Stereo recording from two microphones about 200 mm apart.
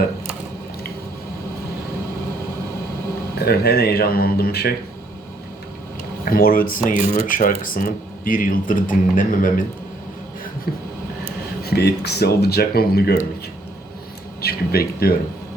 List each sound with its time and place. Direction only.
3.3 s speech: 50° left (ahead or behind)
6.3 s speech: 45° left (ahead or behind)
10.7 s speech: 50° left (ahead or behind)
14.4 s speech: 50° left (ahead or behind)